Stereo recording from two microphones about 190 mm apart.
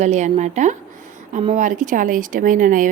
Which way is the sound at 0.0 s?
40° right (ahead or behind).